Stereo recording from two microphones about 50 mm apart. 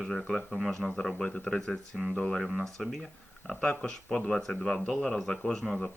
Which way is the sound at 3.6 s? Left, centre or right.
Centre.